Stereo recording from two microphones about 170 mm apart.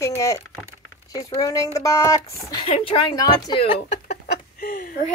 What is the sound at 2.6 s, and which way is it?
Speech, 30° left (ahead or behind).